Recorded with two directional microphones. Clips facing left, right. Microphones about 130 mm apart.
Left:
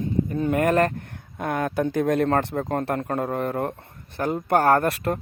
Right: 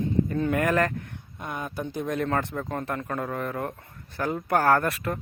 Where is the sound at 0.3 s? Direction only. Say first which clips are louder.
Left 3 dB; 20° left (ahead or behind).